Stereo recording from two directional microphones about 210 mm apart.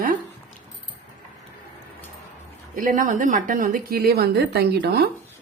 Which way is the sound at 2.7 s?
40° right (ahead or behind).